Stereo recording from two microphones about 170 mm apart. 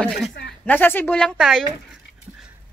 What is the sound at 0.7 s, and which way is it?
Speech, 10° left (ahead or behind).